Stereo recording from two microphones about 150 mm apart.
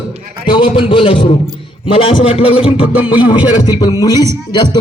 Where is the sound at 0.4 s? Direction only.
35° left (ahead or behind).